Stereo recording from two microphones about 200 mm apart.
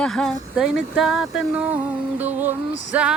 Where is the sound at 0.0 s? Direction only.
Centre (ahead or behind).